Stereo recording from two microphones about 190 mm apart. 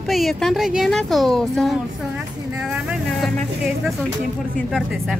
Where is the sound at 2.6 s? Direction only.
Centre (ahead or behind).